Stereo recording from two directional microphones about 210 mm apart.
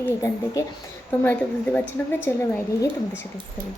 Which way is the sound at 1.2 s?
10° left (ahead or behind).